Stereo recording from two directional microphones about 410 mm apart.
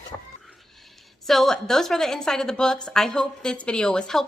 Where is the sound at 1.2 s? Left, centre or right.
Centre.